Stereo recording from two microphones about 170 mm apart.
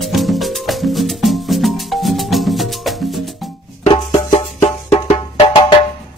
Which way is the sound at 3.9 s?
25° left (ahead or behind).